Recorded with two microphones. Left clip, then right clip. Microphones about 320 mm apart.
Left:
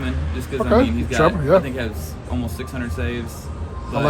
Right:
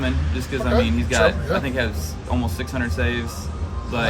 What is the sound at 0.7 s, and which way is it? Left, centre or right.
Speech, left.